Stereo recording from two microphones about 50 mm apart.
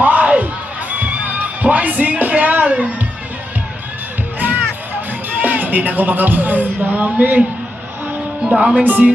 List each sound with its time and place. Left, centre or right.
0.0 s music: right
4.4 s music: right
5.3 s speech: right
8.4 s music: centre
8.8 s speech: right